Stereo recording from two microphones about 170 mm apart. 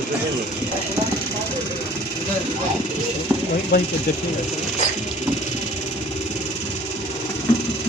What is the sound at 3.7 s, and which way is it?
Speech, 70° left (ahead or behind).